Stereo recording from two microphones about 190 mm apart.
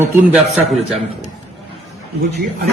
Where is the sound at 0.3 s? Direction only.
Centre (ahead or behind).